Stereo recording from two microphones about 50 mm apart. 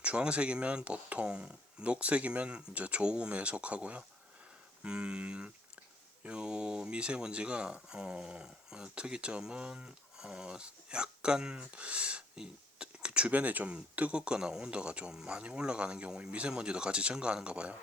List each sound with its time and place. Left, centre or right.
0.0 s speech: right